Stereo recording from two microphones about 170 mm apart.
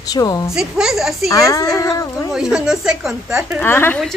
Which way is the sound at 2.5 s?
5° right (ahead or behind).